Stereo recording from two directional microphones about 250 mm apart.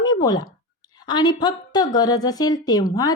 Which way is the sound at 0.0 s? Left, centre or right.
Centre.